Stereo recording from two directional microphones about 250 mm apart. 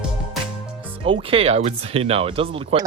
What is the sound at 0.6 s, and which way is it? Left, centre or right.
Music, centre.